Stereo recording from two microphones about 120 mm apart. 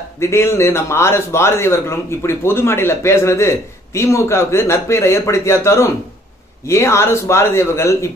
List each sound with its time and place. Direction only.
0.2 s a man's voice: 20° left (ahead or behind)